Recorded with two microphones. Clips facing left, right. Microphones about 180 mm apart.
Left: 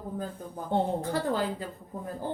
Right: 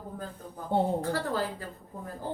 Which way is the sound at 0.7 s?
5° right (ahead or behind).